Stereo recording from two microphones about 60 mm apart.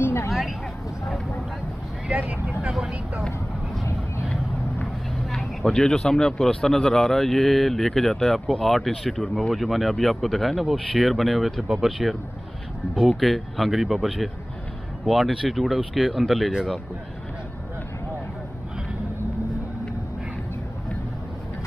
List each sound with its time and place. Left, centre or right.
0.0 s vehicle: left
0.3 s vehicle: centre
2.0 s vehicle: right
2.6 s vehicle: centre
5.3 s a man's voice: centre
13.2 s a man's voice: centre